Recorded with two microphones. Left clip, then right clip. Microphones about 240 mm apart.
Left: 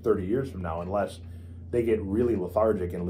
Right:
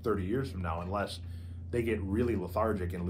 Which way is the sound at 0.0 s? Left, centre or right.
Centre.